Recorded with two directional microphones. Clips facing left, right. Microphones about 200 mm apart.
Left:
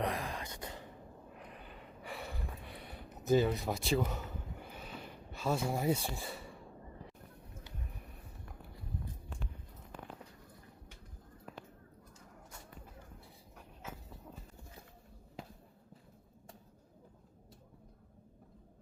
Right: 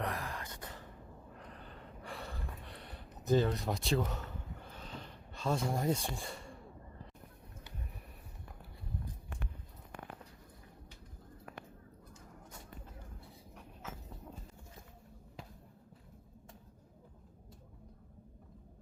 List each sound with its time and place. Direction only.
0.0 s gasp: 15° left (ahead or behind)